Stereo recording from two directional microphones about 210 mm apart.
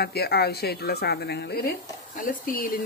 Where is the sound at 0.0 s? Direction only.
50° left (ahead or behind).